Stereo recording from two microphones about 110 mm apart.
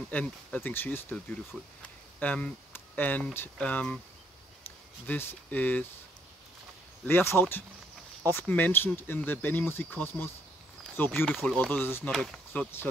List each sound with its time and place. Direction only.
0.1 s speech: 15° left (ahead or behind)
1.8 s a sound: 15° left (ahead or behind)
3.5 s speech: 10° left (ahead or behind)
5.0 s speech: 15° left (ahead or behind)
7.1 s speech: 20° left (ahead or behind)
12.1 s speech: 5° left (ahead or behind)